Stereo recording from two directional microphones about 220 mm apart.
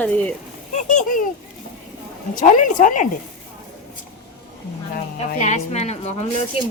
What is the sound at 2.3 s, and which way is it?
Speech, 35° left (ahead or behind).